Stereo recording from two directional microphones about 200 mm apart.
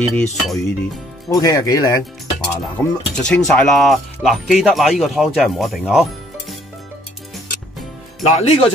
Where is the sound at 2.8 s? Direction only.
5° left (ahead or behind).